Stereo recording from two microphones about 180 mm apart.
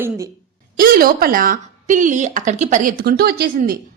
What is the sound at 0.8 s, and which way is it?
A woman's voice, 55° right (ahead or behind).